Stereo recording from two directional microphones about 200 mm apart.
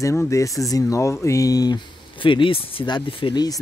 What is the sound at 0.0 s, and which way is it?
Speech, 15° left (ahead or behind).